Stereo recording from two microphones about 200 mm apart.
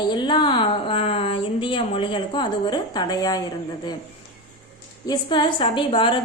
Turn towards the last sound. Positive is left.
turn(degrees=25)  # may be behind; listen again after turning